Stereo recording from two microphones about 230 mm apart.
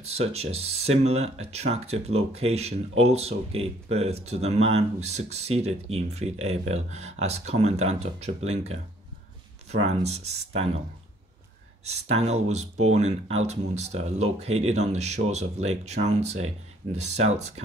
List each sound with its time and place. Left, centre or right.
0.0 s speech: right
11.8 s speech: right